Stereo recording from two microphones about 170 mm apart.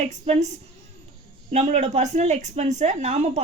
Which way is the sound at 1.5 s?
40° right (ahead or behind).